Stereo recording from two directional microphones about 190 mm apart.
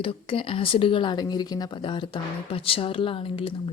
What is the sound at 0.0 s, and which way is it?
Speech, 30° left (ahead or behind).